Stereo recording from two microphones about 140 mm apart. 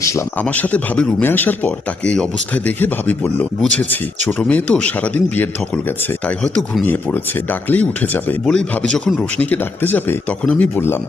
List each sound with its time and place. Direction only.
0.0 s speech: 20° left (ahead or behind)
0.3 s speech: 10° left (ahead or behind)